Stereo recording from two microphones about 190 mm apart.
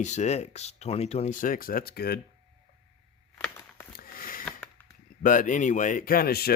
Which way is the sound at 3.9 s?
50° left (ahead or behind).